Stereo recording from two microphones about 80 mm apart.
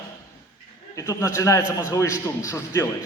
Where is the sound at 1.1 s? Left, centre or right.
Left.